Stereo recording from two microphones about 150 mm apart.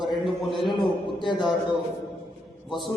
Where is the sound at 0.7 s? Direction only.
30° left (ahead or behind).